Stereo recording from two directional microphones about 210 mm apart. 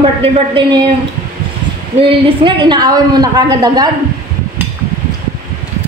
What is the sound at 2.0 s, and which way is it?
Speech, 25° right (ahead or behind).